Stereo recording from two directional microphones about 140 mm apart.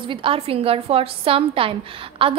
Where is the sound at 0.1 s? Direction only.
40° right (ahead or behind).